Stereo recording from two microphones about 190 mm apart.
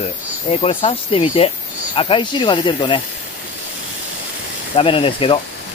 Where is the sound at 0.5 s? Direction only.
30° left (ahead or behind).